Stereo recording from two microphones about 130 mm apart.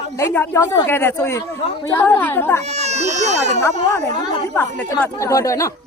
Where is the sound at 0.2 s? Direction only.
20° left (ahead or behind).